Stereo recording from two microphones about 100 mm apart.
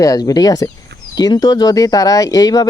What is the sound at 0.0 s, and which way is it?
Speech, 35° left (ahead or behind).